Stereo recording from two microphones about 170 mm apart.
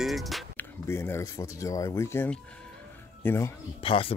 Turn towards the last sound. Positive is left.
turn(degrees=30)  # may be behind; listen again after turning